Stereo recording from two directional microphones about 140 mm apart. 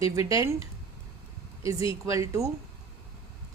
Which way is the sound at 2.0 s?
20° right (ahead or behind).